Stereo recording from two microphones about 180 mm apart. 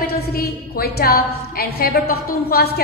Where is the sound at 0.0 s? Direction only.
60° left (ahead or behind).